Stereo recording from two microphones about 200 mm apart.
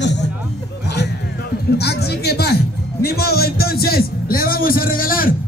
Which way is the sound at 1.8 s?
55° left (ahead or behind).